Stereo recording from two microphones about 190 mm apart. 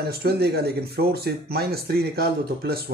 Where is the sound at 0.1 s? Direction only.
55° right (ahead or behind).